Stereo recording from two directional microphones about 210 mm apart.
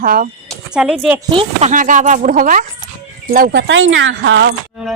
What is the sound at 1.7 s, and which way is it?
Speech, 40° right (ahead or behind).